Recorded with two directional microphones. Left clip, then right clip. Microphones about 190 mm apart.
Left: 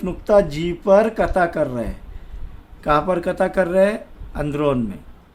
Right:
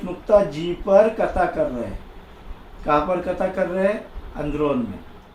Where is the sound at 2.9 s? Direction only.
55° left (ahead or behind).